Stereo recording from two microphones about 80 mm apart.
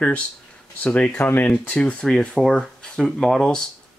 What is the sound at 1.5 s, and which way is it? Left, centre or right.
Speech, centre.